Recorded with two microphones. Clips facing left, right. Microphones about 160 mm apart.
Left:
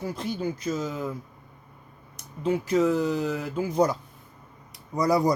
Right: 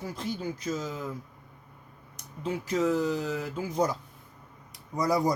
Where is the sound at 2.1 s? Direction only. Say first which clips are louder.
Left 7 dB; 65° left (ahead or behind).